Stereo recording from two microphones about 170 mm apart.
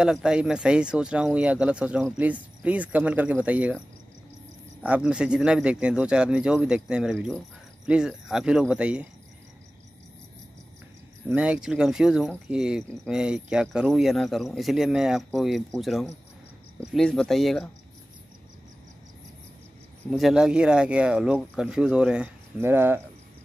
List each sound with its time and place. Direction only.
0.0 s speech: 5° right (ahead or behind)
4.8 s speech: 5° right (ahead or behind)
11.2 s speech: 5° right (ahead or behind)
20.1 s speech: centre (ahead or behind)